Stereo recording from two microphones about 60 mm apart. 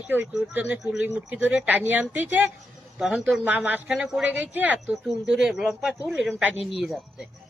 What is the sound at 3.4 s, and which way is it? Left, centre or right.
Speech, right.